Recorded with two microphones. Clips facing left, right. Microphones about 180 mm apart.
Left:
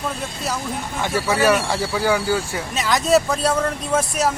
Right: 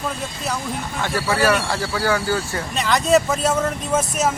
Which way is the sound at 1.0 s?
20° left (ahead or behind).